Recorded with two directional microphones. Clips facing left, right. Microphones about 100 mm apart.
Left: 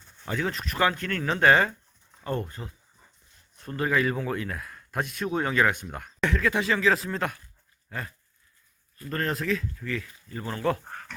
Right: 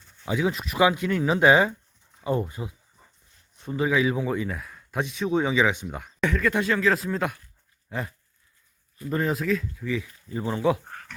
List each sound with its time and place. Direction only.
0.3 s speech: 10° right (ahead or behind)
7.9 s dog: 15° right (ahead or behind)
9.0 s speech: 10° right (ahead or behind)